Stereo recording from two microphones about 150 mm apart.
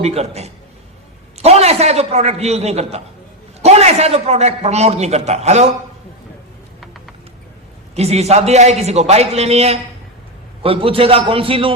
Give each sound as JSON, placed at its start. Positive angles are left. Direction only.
{"t": 0.0, "sound": "a man's voice", "side_deg": -45}
{"t": 7.9, "sound": "a man's voice", "side_deg": -45}